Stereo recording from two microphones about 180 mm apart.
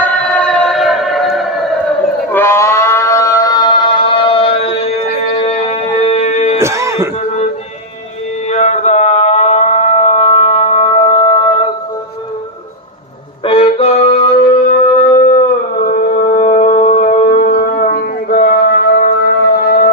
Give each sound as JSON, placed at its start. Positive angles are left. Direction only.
{"t": 0.0, "sound": "music", "side_deg": 5}
{"t": 2.3, "sound": "a sound", "side_deg": 15}
{"t": 5.3, "sound": "music", "side_deg": 30}
{"t": 6.6, "sound": "throat clearing", "side_deg": -15}
{"t": 8.4, "sound": "music", "side_deg": 40}
{"t": 13.4, "sound": "music", "side_deg": 30}
{"t": 15.7, "sound": "music", "side_deg": 50}